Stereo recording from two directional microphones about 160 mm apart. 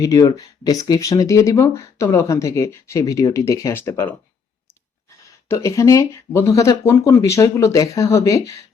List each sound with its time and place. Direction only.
0.0 s speech: 20° left (ahead or behind)
5.5 s speech: 20° left (ahead or behind)